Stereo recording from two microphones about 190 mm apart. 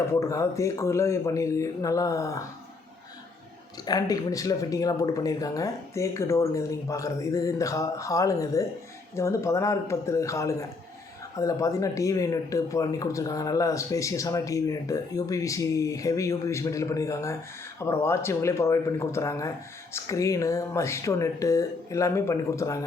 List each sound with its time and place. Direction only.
0.1 s speech: 15° left (ahead or behind)
3.8 s speech: 20° left (ahead or behind)